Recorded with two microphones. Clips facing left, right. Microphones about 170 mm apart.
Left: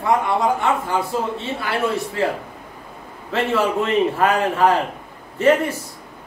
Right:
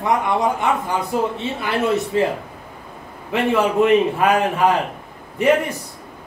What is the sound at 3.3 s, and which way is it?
Speech, 15° right (ahead or behind).